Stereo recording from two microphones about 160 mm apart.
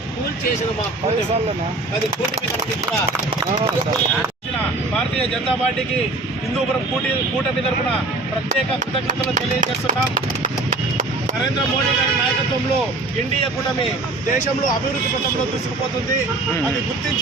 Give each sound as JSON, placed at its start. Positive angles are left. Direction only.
{"t": 9.0, "sound": "speech", "side_deg": -55}